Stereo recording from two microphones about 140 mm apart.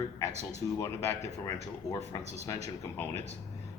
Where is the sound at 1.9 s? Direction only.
25° left (ahead or behind).